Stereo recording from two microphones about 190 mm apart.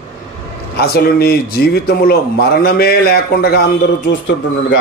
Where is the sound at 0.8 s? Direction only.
55° left (ahead or behind).